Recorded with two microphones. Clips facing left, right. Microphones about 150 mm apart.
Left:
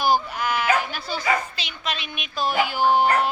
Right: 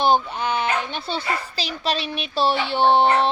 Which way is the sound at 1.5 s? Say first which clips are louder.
Right 6 dB; 35° right (ahead or behind).